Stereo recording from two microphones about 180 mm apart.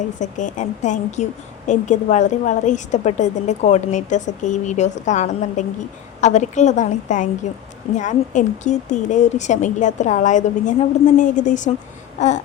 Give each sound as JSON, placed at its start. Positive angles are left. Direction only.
{"t": 0.2, "sound": "a woman's voice", "side_deg": 45}